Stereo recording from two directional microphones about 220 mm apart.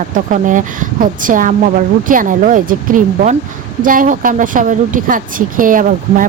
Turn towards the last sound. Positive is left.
turn(degrees=-40)  # may be behind; listen again after turning